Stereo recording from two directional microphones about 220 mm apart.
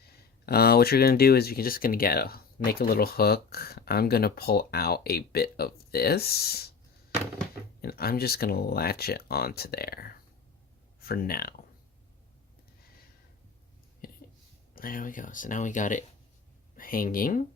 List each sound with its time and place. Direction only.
0.4 s speech: 45° left (ahead or behind)
7.8 s speech: 45° left (ahead or behind)
14.8 s speech: 40° left (ahead or behind)